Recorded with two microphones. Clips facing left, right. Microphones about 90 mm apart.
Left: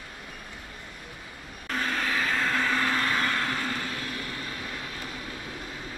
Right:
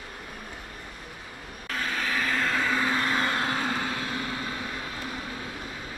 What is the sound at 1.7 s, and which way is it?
Vehicle, centre (ahead or behind).